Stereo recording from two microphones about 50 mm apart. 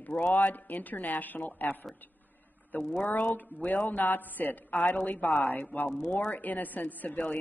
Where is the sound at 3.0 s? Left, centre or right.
Left.